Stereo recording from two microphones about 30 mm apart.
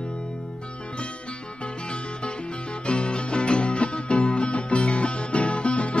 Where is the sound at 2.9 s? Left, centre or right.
Left.